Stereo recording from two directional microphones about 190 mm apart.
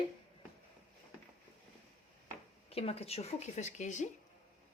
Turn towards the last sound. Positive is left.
turn(degrees=40)  # may be behind; listen again after turning